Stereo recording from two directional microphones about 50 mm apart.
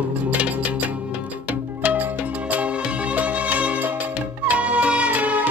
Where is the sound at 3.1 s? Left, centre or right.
Right.